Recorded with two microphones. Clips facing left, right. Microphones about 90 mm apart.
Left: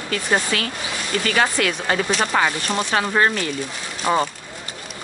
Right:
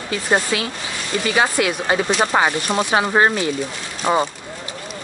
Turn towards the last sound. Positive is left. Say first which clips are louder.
# right 1 dB
turn(degrees=-10)  # may be behind; listen again after turning